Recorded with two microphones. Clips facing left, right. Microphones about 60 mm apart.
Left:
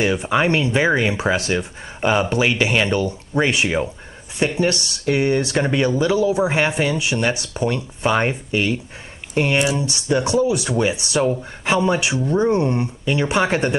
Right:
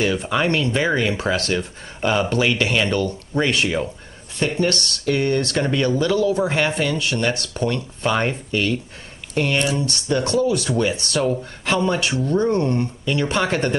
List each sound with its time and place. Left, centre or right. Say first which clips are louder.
0.0 s speech: left 2 dB; centre